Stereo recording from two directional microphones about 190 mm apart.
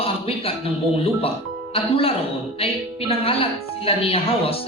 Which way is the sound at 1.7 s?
30° left (ahead or behind).